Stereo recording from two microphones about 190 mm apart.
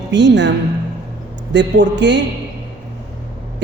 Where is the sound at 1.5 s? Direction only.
70° right (ahead or behind).